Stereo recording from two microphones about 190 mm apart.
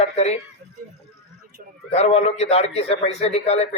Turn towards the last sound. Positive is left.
turn(degrees=35)  # may be behind; listen again after turning